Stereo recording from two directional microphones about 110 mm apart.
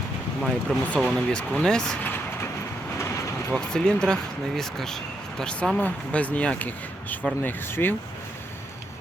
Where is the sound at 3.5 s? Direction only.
5° left (ahead or behind).